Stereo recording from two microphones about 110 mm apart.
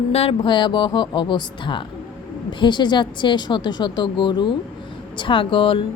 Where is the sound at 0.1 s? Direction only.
65° left (ahead or behind).